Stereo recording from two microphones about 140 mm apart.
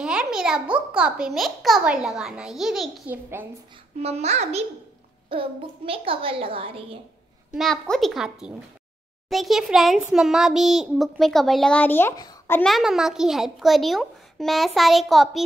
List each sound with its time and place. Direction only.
0.0 s a child's voice: 5° right (ahead or behind)
4.0 s a child's voice: 50° right (ahead or behind)
5.3 s a child's voice: 40° right (ahead or behind)
7.5 s a child's voice: centre (ahead or behind)
12.6 s a child's voice: centre (ahead or behind)